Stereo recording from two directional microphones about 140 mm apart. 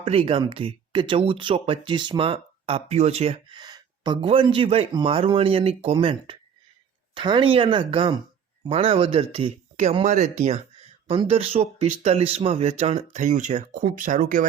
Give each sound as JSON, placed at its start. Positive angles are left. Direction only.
{"t": 0.0, "sound": "speech", "side_deg": -45}
{"t": 3.6, "sound": "speech", "side_deg": -30}